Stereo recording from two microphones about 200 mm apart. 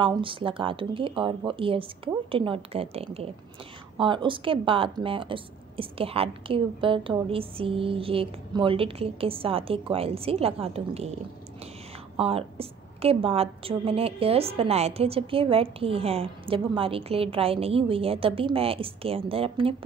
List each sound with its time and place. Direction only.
0.0 s a woman's voice: 25° right (ahead or behind)
12.2 s a woman's voice: 30° right (ahead or behind)